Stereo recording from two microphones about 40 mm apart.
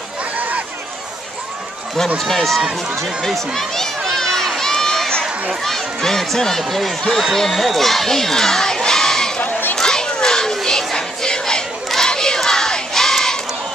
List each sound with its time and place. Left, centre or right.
2.1 s speech: centre
3.0 s crowd: centre
5.6 s speech: centre
9.4 s a sound: left
9.8 s children playing: centre
11.0 s crowd: centre
11.9 s battle cry: centre